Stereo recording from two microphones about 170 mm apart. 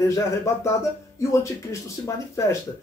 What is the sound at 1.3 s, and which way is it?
A man's voice, 15° left (ahead or behind).